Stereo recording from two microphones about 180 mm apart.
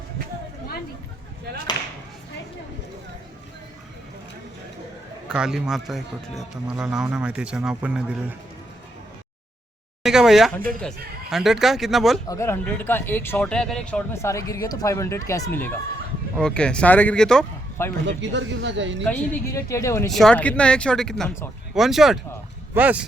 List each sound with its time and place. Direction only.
5.3 s a man's voice: 5° right (ahead or behind)
10.0 s a man's voice: 5° right (ahead or behind)
12.3 s a man's voice: 15° left (ahead or behind)
18.0 s speech: 85° right
19.0 s speech: 10° left (ahead or behind)
20.1 s a man's voice: centre (ahead or behind)